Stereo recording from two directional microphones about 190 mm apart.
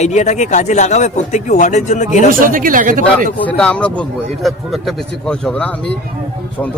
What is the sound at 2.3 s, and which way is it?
Speech, 45° right (ahead or behind).